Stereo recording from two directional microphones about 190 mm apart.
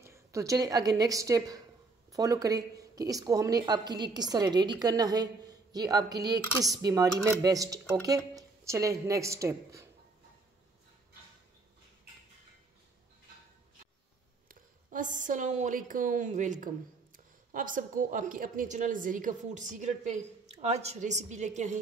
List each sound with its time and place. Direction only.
0.0 s a woman's voice: 15° right (ahead or behind)
14.5 s a woman's voice: 45° right (ahead or behind)